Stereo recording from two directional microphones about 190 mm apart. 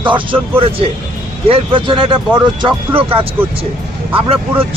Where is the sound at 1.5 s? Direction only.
25° right (ahead or behind).